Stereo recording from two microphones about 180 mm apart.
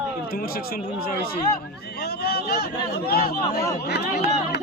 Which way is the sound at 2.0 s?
65° left (ahead or behind).